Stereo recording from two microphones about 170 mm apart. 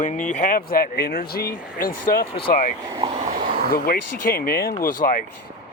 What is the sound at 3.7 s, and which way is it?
Speech, 60° left (ahead or behind).